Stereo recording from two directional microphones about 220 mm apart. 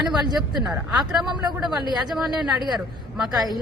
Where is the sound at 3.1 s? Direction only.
Centre (ahead or behind).